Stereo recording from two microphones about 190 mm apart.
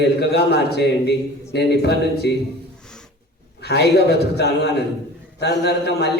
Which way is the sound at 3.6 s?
60° left (ahead or behind).